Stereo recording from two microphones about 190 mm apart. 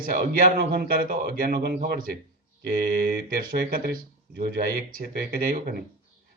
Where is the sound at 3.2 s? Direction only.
50° right (ahead or behind).